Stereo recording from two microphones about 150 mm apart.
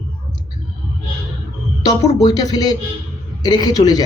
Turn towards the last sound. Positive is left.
turn(degrees=25)  # may be behind; listen again after turning